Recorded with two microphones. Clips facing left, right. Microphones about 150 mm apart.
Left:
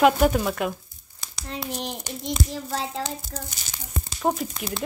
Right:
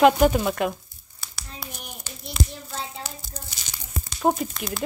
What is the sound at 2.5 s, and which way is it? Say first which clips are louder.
Hands: left 6 dB; 90° left.